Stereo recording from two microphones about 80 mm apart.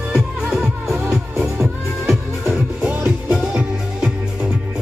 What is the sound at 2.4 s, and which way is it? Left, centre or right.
Music, right.